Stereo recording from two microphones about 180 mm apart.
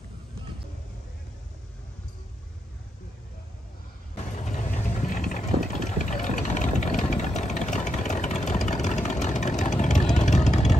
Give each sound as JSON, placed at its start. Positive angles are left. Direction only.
{"t": 4.3, "sound": "vehicle", "side_deg": 40}